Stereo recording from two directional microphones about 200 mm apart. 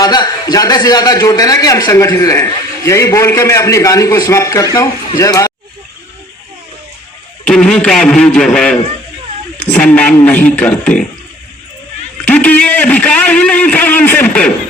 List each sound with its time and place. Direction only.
0.0 s a man's voice: 20° left (ahead or behind)
7.4 s a man's voice: 5° left (ahead or behind)
12.2 s a man's voice: 5° left (ahead or behind)